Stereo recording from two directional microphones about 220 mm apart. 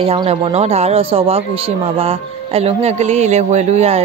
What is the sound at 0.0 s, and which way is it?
Speech, 25° right (ahead or behind).